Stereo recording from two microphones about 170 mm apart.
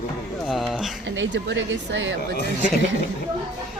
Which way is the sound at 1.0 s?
90° right.